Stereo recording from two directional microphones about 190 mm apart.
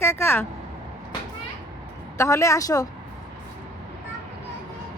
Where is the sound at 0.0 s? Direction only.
15° left (ahead or behind).